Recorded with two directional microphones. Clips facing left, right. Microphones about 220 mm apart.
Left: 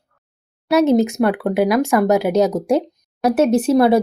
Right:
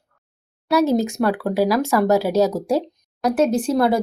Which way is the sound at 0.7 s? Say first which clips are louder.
Left 4 dB; 20° left (ahead or behind).